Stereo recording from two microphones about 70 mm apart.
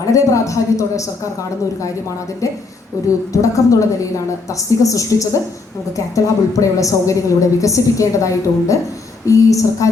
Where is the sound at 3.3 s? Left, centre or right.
Left.